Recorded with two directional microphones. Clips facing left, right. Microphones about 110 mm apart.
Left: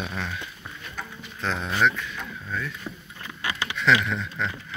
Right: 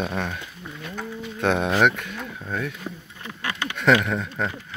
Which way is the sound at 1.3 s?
60° right (ahead or behind).